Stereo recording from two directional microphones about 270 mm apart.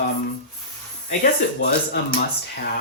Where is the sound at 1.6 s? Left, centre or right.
Left.